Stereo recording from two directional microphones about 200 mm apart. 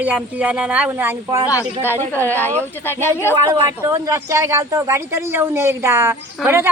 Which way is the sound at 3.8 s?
15° right (ahead or behind).